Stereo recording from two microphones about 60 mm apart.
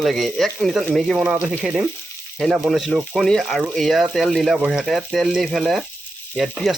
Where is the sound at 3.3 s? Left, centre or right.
Centre.